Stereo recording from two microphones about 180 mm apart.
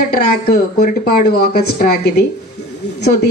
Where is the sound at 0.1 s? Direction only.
55° left (ahead or behind).